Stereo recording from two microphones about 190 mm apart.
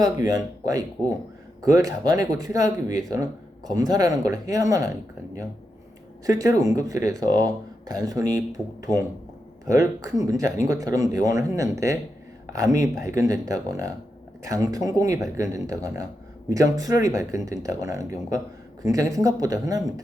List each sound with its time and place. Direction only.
0.0 s speech: 20° right (ahead or behind)
6.2 s speech: 20° right (ahead or behind)